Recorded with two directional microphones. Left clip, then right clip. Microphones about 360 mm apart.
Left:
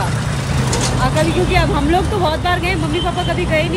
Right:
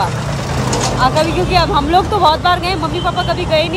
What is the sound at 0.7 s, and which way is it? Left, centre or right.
Vehicle, right.